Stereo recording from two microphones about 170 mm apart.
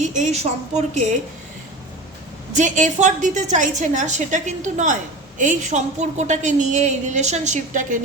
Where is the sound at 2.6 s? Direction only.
50° right (ahead or behind).